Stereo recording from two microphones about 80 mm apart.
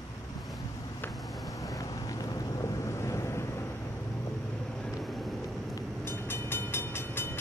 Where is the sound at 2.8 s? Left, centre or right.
Left.